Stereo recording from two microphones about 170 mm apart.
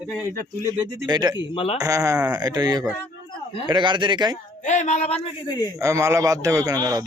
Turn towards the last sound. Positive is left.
turn(degrees=-20)  # may be behind; listen again after turning